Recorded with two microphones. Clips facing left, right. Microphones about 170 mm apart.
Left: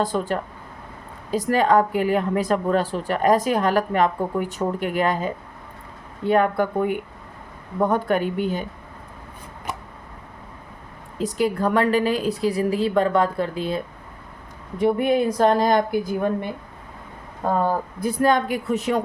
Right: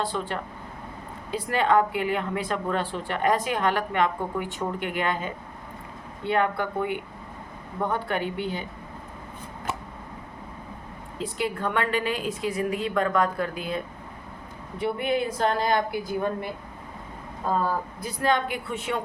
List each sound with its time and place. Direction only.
0.0 s speech: 45° left (ahead or behind)
11.2 s speech: 40° left (ahead or behind)
14.8 s speech: 45° left (ahead or behind)
18.0 s speech: 45° left (ahead or behind)